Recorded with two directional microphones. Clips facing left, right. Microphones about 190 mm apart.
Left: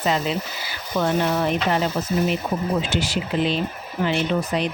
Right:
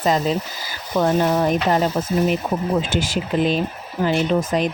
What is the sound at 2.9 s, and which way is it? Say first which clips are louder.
Speech: right 2 dB; 45° right (ahead or behind).